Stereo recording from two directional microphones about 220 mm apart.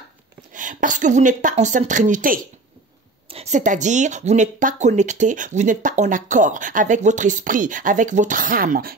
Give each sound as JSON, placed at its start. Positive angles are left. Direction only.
{"t": 0.5, "sound": "a woman's voice", "side_deg": -35}